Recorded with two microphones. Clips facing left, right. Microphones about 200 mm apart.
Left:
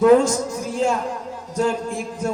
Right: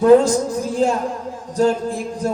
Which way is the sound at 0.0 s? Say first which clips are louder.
Right 2 dB; 35° right (ahead or behind).